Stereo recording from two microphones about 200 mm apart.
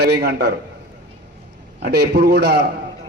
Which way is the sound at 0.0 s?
55° right (ahead or behind).